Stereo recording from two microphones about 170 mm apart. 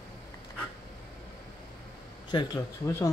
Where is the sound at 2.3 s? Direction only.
20° left (ahead or behind).